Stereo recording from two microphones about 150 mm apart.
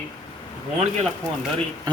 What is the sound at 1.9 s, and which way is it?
Speech, 30° right (ahead or behind).